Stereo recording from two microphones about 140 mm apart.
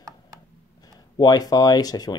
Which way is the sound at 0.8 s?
30° left (ahead or behind).